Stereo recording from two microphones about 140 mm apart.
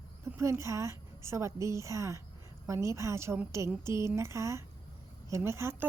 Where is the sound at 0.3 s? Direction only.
20° right (ahead or behind).